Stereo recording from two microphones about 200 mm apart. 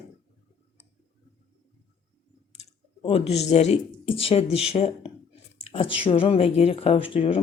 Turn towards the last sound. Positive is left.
turn(degrees=25)  # may be behind; listen again after turning